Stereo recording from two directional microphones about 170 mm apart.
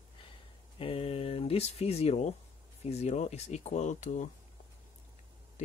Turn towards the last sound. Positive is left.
turn(degrees=45)  # may be behind; listen again after turning